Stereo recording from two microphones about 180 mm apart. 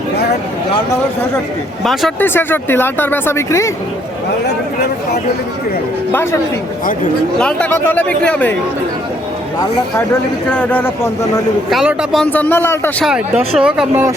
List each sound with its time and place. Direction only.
1.8 s speech: centre (ahead or behind)
4.4 s speech: 60° left (ahead or behind)
6.1 s speech: 10° left (ahead or behind)
10.5 s speech: 10° left (ahead or behind)
11.7 s speech: centre (ahead or behind)
13.1 s speech: 5° right (ahead or behind)